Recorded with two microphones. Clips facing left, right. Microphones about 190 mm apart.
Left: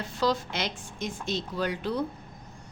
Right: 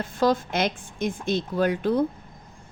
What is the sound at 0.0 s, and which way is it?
A woman's voice, 50° right (ahead or behind).